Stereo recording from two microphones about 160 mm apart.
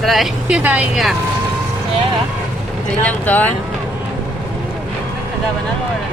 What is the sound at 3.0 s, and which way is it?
Speech, 10° left (ahead or behind).